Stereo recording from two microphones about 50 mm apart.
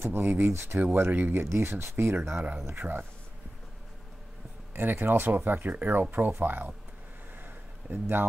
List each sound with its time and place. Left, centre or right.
0.0 s speech: right
0.5 s speech: right
0.7 s speech: right
2.3 s speech: right
2.6 s speech: right
4.7 s speech: right
7.3 s a sound: right